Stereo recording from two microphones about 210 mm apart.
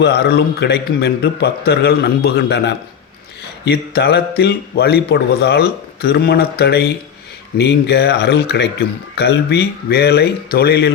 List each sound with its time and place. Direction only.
0.0 s speech: 50° left (ahead or behind)